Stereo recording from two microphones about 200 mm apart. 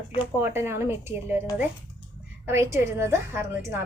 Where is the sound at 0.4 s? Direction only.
10° right (ahead or behind).